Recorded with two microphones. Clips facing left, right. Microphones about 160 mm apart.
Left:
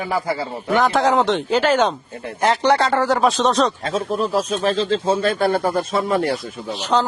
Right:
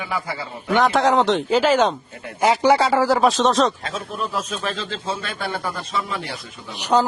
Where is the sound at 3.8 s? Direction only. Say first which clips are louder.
Left 7 dB; 35° left (ahead or behind).